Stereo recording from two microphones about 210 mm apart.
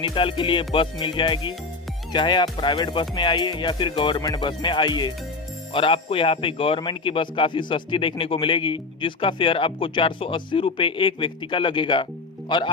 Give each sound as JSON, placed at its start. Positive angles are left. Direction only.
{"t": 0.0, "sound": "speech", "side_deg": 25}